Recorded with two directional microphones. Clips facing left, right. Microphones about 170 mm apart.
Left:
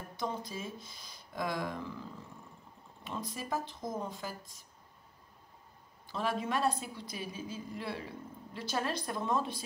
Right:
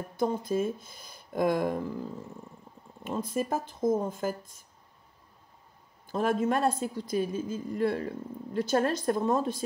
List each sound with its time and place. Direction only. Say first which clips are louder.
0.2 s a woman's voice: right 11 dB; 50° right (ahead or behind)
3.0 s a woman's voice: right 10 dB; 50° right (ahead or behind)
6.0 s a woman's voice: right 8 dB; 50° right (ahead or behind)